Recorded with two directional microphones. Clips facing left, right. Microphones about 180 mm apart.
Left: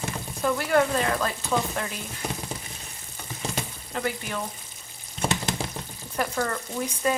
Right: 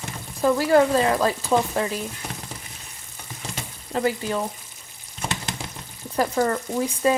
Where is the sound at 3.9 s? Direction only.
30° right (ahead or behind).